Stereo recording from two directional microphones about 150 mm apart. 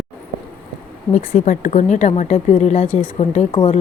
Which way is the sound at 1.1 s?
60° left (ahead or behind).